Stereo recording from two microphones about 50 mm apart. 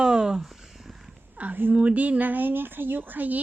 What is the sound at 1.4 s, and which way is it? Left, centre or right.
Speech, right.